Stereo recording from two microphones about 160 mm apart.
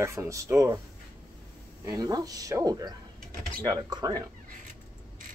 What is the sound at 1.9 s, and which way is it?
Speech, 25° right (ahead or behind).